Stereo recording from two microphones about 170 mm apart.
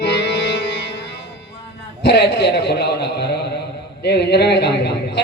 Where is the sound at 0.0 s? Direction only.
90° left.